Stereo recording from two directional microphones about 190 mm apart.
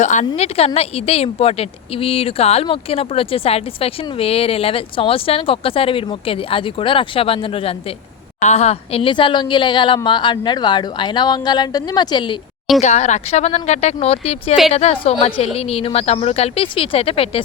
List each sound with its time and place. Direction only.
0.0 s a woman's voice: 40° left (ahead or behind)
12.8 s speech: 40° left (ahead or behind)